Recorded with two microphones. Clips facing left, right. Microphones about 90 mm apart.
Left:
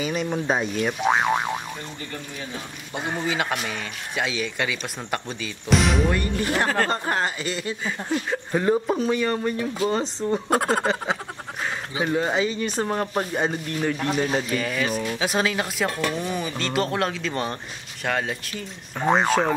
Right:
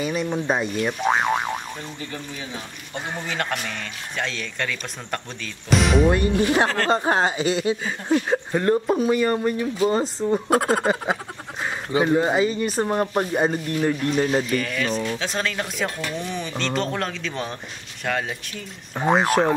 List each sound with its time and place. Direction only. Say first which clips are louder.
0.0 s speech: right 1 dB; centre (ahead or behind)
2.9 s speech: left 3 dB; 10° left (ahead or behind)
6.0 s speech: right 5 dB; 20° right (ahead or behind)
8.5 s speech: even; 5° left (ahead or behind)